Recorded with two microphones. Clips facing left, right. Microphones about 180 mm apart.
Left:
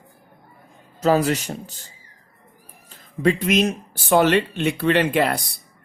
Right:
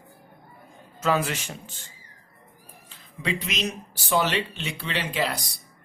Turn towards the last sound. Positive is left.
turn(degrees=55)  # may be behind; listen again after turning